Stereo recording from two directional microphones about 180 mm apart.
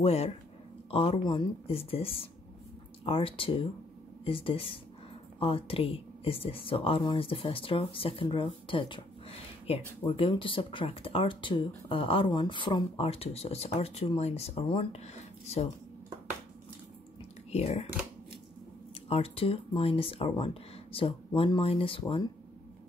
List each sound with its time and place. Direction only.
0.0 s speech: 35° left (ahead or behind)
17.5 s speech: 35° left (ahead or behind)
19.0 s speech: 35° left (ahead or behind)